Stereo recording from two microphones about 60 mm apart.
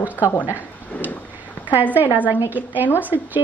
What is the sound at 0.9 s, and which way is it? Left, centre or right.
Speech, left.